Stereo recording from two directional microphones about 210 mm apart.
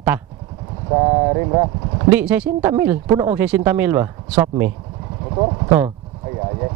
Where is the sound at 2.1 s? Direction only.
5° right (ahead or behind).